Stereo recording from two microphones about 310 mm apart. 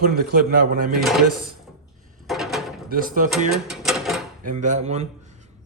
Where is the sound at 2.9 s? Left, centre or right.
Right.